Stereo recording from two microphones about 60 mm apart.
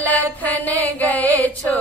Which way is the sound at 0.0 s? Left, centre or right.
Left.